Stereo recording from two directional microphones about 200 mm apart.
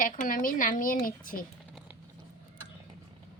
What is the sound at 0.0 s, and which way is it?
Speech, 45° left (ahead or behind).